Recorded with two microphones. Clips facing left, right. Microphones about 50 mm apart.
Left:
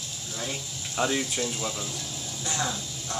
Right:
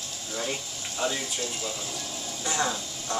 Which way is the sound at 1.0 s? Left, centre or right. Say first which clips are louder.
Left 3 dB; left.